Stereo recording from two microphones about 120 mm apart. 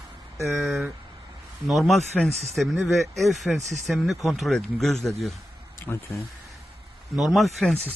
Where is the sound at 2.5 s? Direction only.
5° right (ahead or behind).